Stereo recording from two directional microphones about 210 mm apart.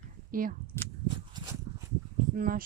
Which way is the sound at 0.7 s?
10° left (ahead or behind).